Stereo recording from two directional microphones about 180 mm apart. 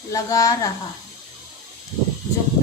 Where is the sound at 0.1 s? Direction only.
20° left (ahead or behind).